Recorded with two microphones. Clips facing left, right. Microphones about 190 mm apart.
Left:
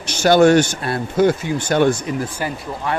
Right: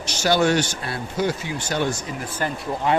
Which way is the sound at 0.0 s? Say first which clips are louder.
Left 7 dB; 55° left (ahead or behind).